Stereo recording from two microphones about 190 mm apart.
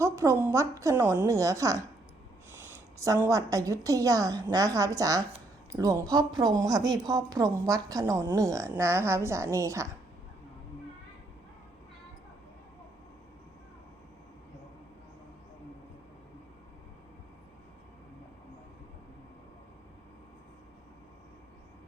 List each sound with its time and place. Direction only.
0.0 s a woman's voice: 15° right (ahead or behind)